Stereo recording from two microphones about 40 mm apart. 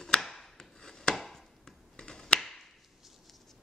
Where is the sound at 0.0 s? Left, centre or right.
Centre.